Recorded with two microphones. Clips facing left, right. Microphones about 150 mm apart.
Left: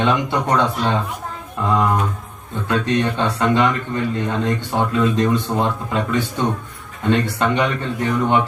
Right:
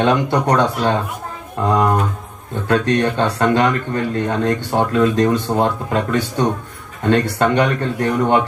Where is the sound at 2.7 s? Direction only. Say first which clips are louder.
Right 3 dB; 40° right (ahead or behind).